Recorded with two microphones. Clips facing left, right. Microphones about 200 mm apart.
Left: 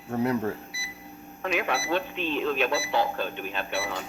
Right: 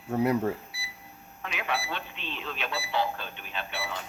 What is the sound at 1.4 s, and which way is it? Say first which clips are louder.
Speech: left 6 dB; 45° left (ahead or behind).